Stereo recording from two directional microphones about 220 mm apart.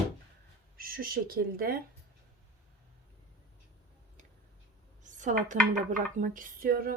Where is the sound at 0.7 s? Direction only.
40° right (ahead or behind).